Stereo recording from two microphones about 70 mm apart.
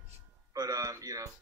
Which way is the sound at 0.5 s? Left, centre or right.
Right.